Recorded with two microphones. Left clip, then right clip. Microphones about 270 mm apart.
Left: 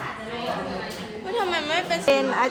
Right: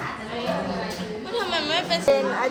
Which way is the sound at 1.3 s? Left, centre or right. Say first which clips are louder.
Even; left.